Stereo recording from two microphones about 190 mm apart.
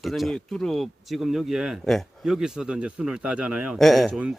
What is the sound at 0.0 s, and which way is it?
Speech, centre (ahead or behind).